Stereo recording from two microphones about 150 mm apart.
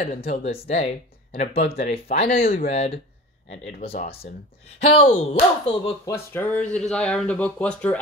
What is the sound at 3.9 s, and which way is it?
Speech, 90° left.